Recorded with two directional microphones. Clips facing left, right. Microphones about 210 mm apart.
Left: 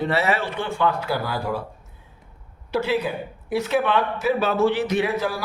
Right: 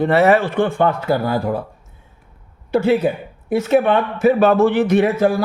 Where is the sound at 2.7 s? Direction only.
50° right (ahead or behind).